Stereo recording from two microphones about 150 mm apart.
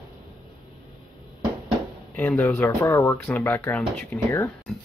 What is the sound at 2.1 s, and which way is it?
Speech, 10° left (ahead or behind).